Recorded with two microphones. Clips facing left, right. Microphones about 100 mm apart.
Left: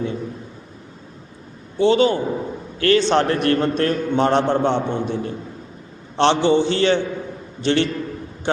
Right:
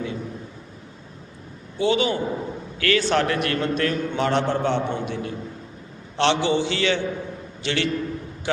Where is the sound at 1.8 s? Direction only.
35° left (ahead or behind).